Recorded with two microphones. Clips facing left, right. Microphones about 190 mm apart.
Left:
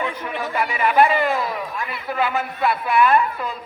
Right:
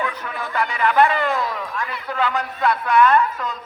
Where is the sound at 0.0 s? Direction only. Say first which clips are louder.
Left 1 dB; 25° left (ahead or behind).